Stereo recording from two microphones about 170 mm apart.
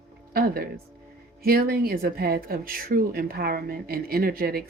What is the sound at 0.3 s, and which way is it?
Speech, 60° right (ahead or behind).